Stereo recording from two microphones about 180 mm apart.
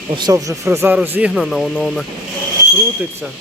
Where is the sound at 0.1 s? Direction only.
25° right (ahead or behind); by 2.0 s centre (ahead or behind).